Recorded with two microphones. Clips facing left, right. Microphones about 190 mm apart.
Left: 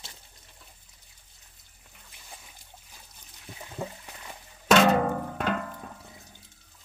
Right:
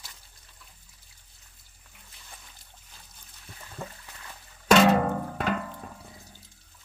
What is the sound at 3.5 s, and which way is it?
Water, 15° left (ahead or behind).